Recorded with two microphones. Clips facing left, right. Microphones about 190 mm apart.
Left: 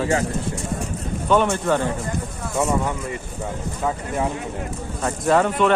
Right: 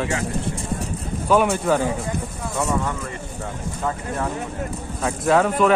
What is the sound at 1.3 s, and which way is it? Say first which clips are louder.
Speech: right 1 dB; 10° right (ahead or behind).